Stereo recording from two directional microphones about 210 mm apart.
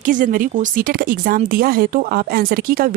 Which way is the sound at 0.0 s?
40° right (ahead or behind).